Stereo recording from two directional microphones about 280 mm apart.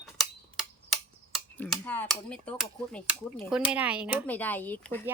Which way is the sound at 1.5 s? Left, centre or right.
Centre.